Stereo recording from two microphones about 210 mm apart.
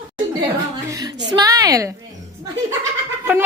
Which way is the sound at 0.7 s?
20° right (ahead or behind).